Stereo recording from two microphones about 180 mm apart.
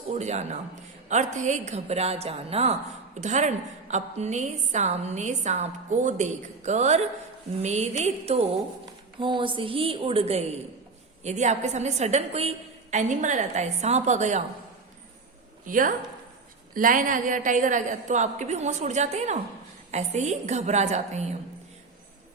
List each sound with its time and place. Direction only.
0.1 s a woman's voice: 40° right (ahead or behind)
15.6 s a woman's voice: 50° right (ahead or behind)